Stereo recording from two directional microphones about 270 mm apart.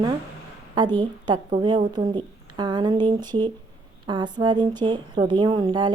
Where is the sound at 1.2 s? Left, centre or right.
Centre.